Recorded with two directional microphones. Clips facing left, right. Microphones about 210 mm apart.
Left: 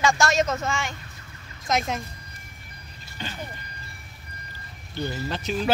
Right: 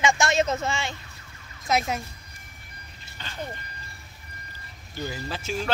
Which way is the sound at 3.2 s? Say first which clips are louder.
Left 7 dB; 15° left (ahead or behind).